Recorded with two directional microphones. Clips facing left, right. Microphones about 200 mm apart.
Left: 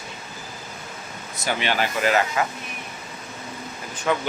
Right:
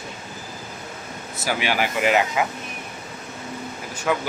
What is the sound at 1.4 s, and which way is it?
Speech, 10° right (ahead or behind).